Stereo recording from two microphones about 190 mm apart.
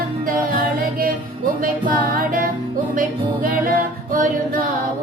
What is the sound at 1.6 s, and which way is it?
Music, 50° right (ahead or behind).